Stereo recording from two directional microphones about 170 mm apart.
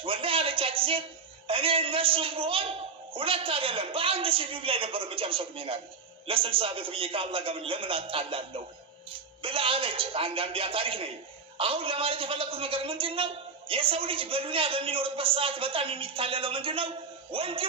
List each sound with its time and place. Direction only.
0.0 s a man's voice: 30° right (ahead or behind)